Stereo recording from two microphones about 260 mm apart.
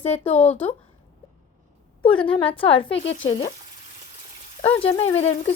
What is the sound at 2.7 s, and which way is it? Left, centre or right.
Speech, left.